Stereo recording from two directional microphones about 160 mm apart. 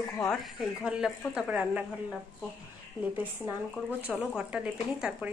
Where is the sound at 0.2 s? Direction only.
Centre (ahead or behind).